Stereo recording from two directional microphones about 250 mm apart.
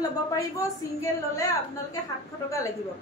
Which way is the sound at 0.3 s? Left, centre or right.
Centre.